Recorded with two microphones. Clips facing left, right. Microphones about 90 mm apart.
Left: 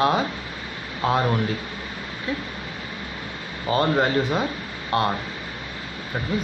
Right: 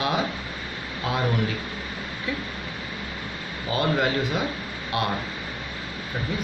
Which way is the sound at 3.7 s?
35° left (ahead or behind).